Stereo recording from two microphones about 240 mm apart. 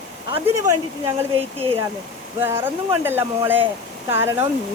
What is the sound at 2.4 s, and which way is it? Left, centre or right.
Speech, centre.